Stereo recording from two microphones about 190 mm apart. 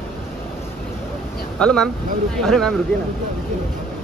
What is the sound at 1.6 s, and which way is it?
Speech, 5° left (ahead or behind).